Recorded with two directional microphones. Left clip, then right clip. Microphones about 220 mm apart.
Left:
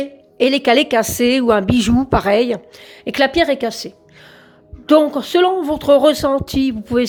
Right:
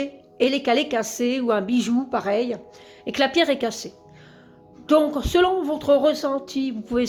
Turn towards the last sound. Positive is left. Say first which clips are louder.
# left 7 dB
turn(degrees=25)  # may be behind; listen again after turning